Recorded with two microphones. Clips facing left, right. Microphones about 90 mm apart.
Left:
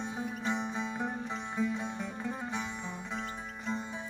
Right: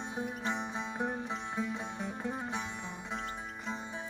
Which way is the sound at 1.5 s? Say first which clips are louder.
Left 6 dB; 15° right (ahead or behind).